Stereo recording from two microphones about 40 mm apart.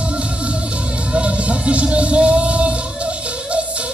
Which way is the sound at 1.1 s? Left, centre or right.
Right.